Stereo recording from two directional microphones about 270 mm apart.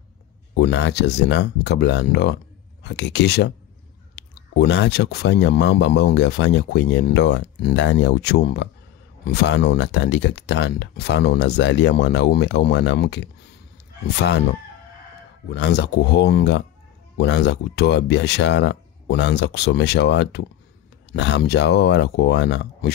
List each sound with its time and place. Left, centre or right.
0.6 s speech: left